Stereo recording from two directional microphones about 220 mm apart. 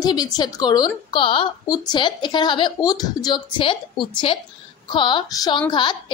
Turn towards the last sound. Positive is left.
turn(degrees=20)  # may be behind; listen again after turning